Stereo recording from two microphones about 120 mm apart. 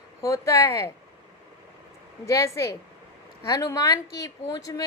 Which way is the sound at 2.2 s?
25° left (ahead or behind).